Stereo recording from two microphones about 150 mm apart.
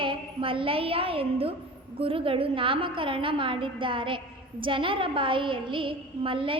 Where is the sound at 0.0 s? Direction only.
35° right (ahead or behind).